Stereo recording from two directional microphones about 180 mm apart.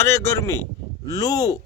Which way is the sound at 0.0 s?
15° left (ahead or behind).